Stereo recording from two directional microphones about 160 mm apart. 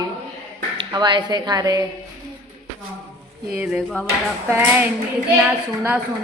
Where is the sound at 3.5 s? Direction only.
5° right (ahead or behind).